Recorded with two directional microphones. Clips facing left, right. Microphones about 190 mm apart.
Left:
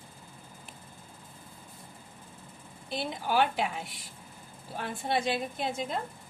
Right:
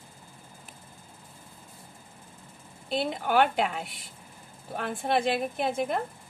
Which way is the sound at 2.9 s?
60° right (ahead or behind).